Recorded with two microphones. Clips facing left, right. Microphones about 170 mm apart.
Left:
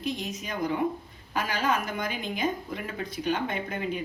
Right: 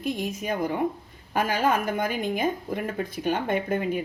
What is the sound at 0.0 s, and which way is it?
A woman's voice, 50° right (ahead or behind).